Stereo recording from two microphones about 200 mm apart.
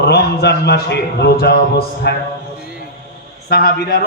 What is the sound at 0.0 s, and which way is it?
A man's voice, 55° left (ahead or behind).